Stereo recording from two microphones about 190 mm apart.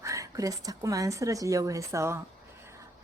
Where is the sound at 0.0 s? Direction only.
15° right (ahead or behind).